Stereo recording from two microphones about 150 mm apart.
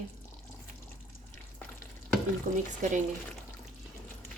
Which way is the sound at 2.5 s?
55° right (ahead or behind).